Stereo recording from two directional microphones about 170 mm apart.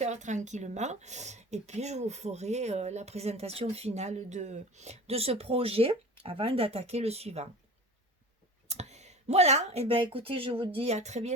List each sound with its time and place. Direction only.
0.0 s speech: 45° right (ahead or behind)
8.6 s speech: 40° right (ahead or behind)